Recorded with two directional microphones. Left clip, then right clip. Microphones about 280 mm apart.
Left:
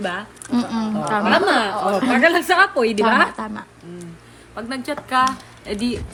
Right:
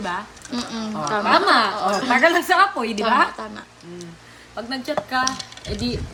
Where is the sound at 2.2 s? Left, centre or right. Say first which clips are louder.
Left 1 dB; centre.